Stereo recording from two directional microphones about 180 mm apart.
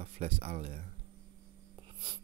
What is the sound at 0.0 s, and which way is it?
Speech, 35° right (ahead or behind).